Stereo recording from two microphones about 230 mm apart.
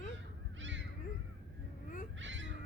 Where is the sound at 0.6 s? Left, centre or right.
Right.